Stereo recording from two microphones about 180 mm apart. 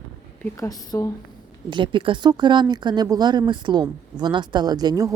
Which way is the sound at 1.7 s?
25° right (ahead or behind).